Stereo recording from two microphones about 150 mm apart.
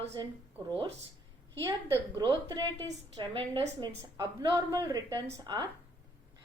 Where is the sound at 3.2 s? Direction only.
30° right (ahead or behind).